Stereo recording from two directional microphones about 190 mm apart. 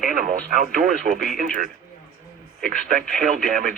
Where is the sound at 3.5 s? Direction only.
45° right (ahead or behind).